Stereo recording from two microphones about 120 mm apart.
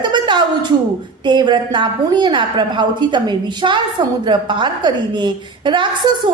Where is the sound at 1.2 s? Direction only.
40° right (ahead or behind).